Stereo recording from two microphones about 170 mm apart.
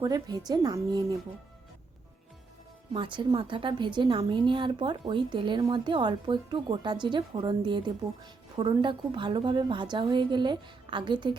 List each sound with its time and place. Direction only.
0.0 s a woman's voice: 20° right (ahead or behind)
2.9 s a woman's voice: 30° right (ahead or behind)